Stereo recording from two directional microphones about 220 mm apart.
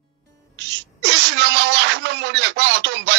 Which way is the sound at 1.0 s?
55° right (ahead or behind).